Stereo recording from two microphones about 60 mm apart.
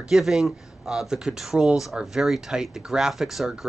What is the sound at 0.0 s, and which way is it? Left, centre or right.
Speech, centre.